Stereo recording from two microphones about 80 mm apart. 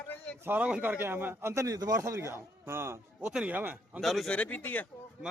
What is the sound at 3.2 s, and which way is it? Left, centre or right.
Speech, centre.